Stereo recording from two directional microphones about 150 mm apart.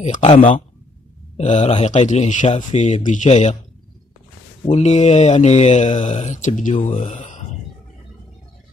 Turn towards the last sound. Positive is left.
turn(degrees=55)  # may be behind; listen again after turning